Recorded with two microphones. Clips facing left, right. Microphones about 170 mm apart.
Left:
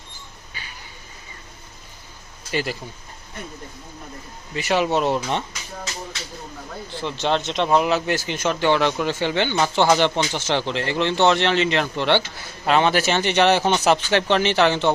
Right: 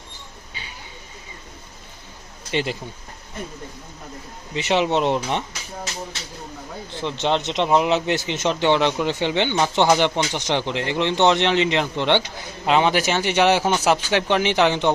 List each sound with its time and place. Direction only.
2.5 s speech: 20° right (ahead or behind)
4.5 s speech: 20° right (ahead or behind)
6.9 s speech: 20° right (ahead or behind)